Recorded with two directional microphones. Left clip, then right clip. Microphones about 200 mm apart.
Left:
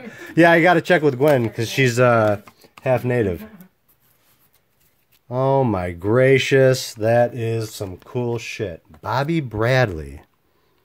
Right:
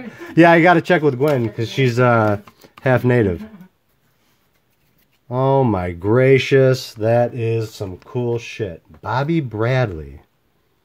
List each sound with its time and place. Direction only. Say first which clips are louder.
0.1 s speech: right 2 dB; centre (ahead or behind)
2.0 s speech: right 1 dB; 5° right (ahead or behind)
2.8 s speech: right 3 dB; 25° right (ahead or behind)
5.3 s speech: right 2 dB; centre (ahead or behind); by 10.2 s 20° left (ahead or behind)